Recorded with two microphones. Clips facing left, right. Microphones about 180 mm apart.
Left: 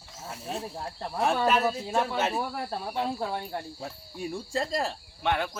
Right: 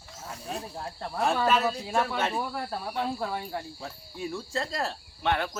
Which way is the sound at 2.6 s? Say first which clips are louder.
Left 1 dB; 20° left (ahead or behind).